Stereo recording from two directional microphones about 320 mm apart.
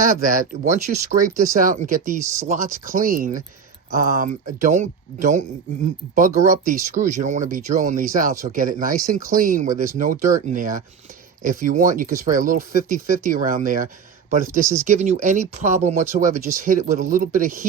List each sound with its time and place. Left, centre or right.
0.0 s speech: right
6.5 s speech: right
14.6 s speech: centre
14.8 s speech: right